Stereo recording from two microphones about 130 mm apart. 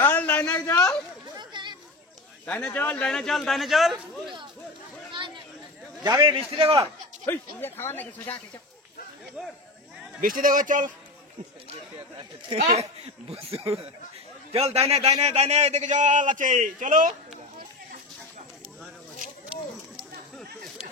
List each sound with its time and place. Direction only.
0.0 s a sound: 15° left (ahead or behind)
0.6 s a sound: 25° left (ahead or behind)
1.3 s chatter: 35° right (ahead or behind)
2.4 s a man's voice: 10° left (ahead or behind)
6.0 s a man's voice: 35° right (ahead or behind)
6.5 s a man's voice: 50° right (ahead or behind)
7.2 s speech: 15° left (ahead or behind)
10.2 s speech: 90° right
12.5 s speech: 55° right (ahead or behind)
14.5 s a man's voice: 50° right (ahead or behind); by 17.1 s 85° right